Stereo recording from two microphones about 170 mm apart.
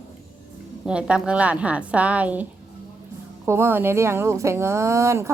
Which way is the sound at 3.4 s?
15° right (ahead or behind).